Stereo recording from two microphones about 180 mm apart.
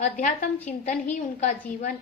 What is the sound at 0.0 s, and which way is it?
A woman's voice, 40° left (ahead or behind).